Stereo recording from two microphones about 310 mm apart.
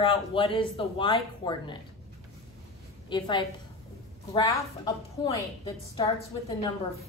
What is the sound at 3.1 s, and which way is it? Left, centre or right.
Speech, centre.